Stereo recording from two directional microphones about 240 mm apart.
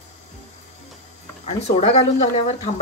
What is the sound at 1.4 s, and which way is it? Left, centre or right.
Speech, left.